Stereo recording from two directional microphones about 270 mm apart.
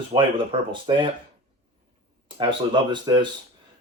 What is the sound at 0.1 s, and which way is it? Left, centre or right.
Speech, centre.